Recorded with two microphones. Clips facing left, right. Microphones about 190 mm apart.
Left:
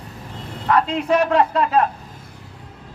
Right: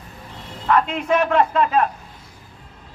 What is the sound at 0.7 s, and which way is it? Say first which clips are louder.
A man's voice: left 1 dB; 35° left (ahead or behind).